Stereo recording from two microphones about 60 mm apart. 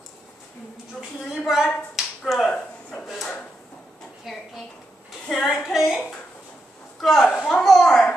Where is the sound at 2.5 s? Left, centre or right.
Centre.